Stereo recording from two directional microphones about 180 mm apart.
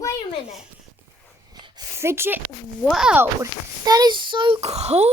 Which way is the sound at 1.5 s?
25° right (ahead or behind).